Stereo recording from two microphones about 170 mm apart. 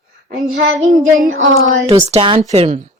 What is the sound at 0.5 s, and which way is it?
Child singing, 45° right (ahead or behind).